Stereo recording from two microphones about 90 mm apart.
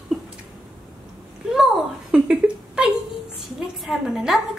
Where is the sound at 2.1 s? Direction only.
10° right (ahead or behind).